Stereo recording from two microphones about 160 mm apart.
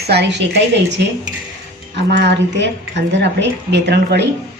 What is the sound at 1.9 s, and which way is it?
A woman's voice, 90° right.